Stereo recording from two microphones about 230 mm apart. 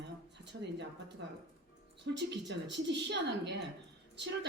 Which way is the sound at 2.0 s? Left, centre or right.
Right.